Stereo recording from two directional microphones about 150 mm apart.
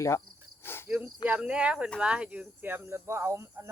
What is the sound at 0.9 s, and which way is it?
Speech, 5° right (ahead or behind).